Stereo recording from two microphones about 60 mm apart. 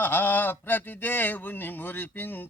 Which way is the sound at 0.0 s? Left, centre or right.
Left.